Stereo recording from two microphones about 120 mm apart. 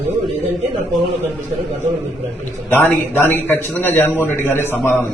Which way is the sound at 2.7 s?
20° left (ahead or behind).